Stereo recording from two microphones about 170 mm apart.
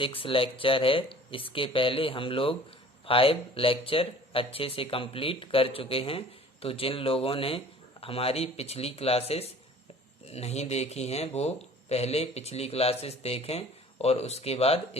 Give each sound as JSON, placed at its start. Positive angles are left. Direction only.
{"t": 0.0, "sound": "speech", "side_deg": 30}